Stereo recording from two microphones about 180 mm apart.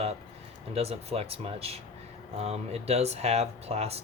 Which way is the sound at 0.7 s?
35° right (ahead or behind).